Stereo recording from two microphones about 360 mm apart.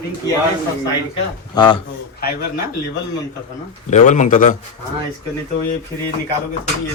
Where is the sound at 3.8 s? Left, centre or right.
Centre.